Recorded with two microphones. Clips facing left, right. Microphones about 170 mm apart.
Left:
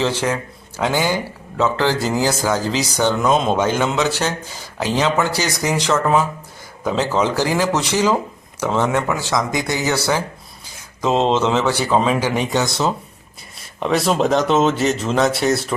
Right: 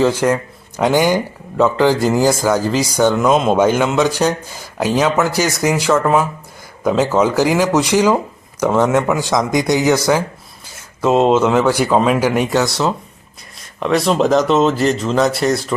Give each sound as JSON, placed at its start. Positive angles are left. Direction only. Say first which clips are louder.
{"t": 0.0, "sound": "a man's voice", "louder": "right 6 dB", "side_deg": -10}